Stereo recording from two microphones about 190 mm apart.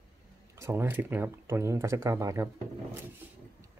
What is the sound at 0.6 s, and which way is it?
Speech, 10° right (ahead or behind).